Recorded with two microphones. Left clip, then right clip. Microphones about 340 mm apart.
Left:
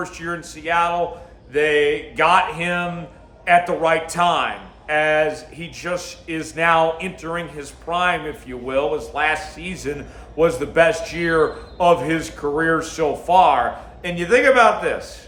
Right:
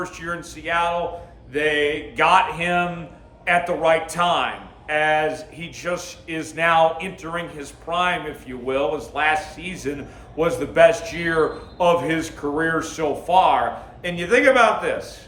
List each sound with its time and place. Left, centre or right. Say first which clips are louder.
0.0 s speech: left 1 dB; centre
1.5 s a sound: left 3 dB; centre
3.4 s speech: left 3 dB; centre